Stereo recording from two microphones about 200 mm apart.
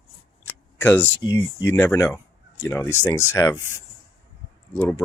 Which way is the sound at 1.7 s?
10° left (ahead or behind).